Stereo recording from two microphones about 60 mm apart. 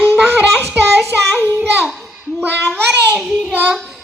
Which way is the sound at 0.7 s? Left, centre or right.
Right.